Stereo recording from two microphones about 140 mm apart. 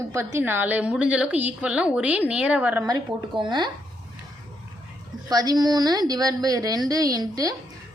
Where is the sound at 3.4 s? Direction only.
35° right (ahead or behind).